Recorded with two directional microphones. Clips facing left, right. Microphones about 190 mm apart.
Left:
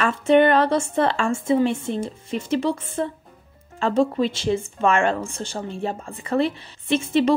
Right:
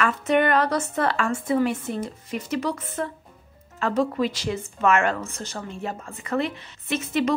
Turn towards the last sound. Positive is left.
turn(degrees=30)  # may be behind; listen again after turning